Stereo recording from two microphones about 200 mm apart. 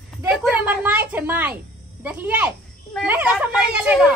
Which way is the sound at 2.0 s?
5° right (ahead or behind).